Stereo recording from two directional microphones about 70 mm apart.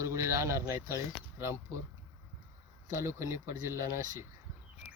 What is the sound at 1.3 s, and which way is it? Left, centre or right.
Speech, right.